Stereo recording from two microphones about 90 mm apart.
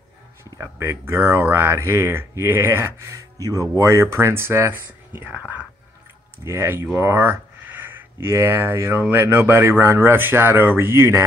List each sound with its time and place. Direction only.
0.6 s speech: 30° right (ahead or behind)
6.4 s speech: 30° right (ahead or behind)